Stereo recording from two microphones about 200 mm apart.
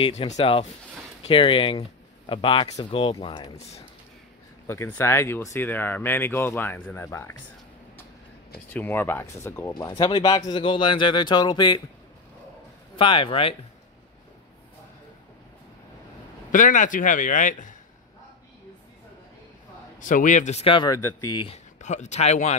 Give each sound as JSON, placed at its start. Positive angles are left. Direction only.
{"t": 0.0, "sound": "speech", "side_deg": 30}
{"t": 4.6, "sound": "speech", "side_deg": 15}
{"t": 8.7, "sound": "speech", "side_deg": 10}
{"t": 12.9, "sound": "speech", "side_deg": 25}
{"t": 16.5, "sound": "a man's voice", "side_deg": 40}
{"t": 20.0, "sound": "a man's voice", "side_deg": 40}
{"t": 21.8, "sound": "a man's voice", "side_deg": 35}